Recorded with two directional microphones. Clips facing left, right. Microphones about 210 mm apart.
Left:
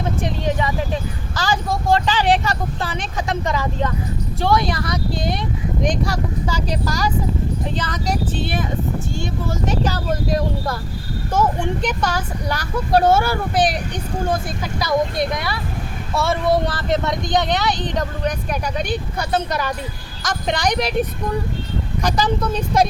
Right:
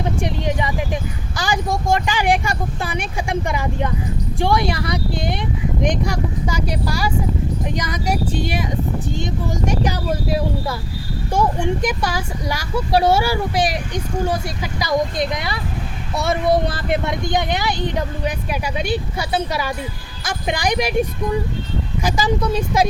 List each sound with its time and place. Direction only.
0.0 s a sound: 15° right (ahead or behind)
1.4 s speech: 15° right (ahead or behind)
22.0 s speech: 10° right (ahead or behind)